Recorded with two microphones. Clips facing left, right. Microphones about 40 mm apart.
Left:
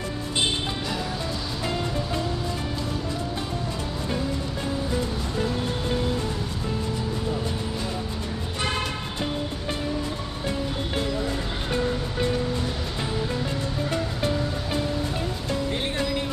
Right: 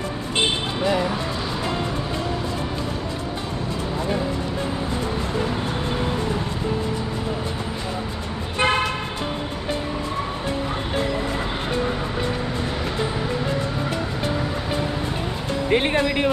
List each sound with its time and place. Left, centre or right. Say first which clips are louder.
0.8 s speech: right 8 dB; right
8.5 s car: right 8 dB; right
15.7 s music: right 9 dB; right